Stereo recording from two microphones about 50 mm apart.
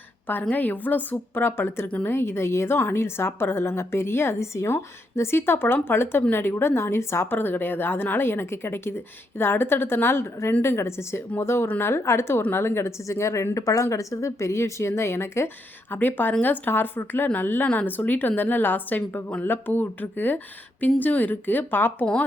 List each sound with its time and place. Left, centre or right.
0.5 s a woman's voice: left
1.1 s a woman's voice: left
4.4 s a woman's voice: left
7.3 s a woman's voice: left
13.1 s speech: left
15.9 s a woman's voice: left